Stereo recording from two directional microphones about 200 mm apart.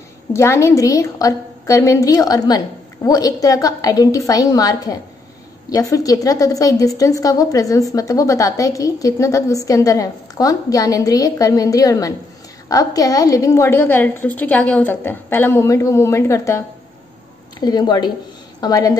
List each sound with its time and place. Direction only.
0.3 s a woman's voice: 15° left (ahead or behind)